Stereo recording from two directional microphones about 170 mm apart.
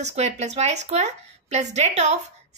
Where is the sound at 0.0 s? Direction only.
40° right (ahead or behind).